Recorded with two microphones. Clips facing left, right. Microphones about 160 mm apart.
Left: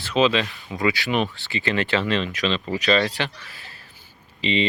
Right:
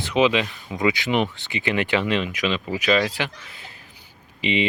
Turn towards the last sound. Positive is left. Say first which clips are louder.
# even
turn(degrees=-15)  # may be behind; listen again after turning